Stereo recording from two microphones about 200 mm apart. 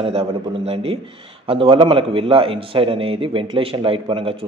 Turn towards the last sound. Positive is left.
turn(degrees=-25)  # may be behind; listen again after turning